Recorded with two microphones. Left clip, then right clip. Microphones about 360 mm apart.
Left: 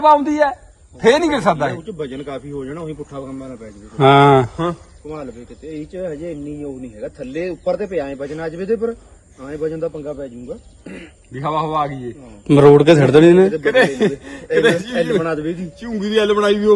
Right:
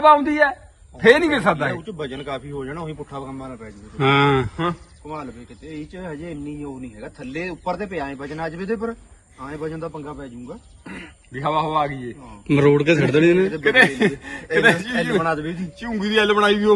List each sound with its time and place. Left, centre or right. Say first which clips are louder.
0.0 s a man's voice: left 2 dB; centre
1.8 s speech: left 3 dB; centre
3.9 s a man's voice: left 7 dB; centre
5.6 s speech: left 7 dB; centre
11.3 s a man's voice: left 1 dB; centre
15.2 s speech: left 2 dB; centre
15.8 s a man's voice: left 2 dB; centre